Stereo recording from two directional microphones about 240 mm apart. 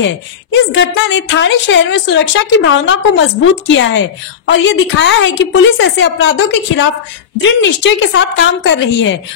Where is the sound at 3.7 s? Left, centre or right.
Left.